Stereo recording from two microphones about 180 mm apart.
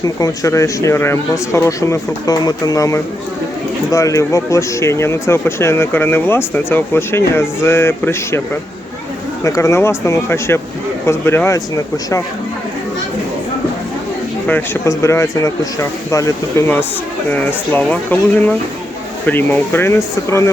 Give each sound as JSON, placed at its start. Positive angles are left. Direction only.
{"t": 0.0, "sound": "speech", "side_deg": 20}
{"t": 9.4, "sound": "speech", "side_deg": 15}
{"t": 14.4, "sound": "speech", "side_deg": 10}